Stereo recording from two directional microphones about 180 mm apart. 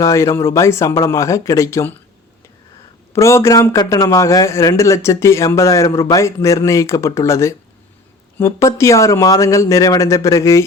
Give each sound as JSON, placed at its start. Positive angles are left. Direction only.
{"t": 0.0, "sound": "a man's voice", "side_deg": 15}
{"t": 3.1, "sound": "a man's voice", "side_deg": 15}